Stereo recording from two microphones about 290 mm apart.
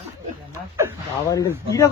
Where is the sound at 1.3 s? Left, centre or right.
Centre.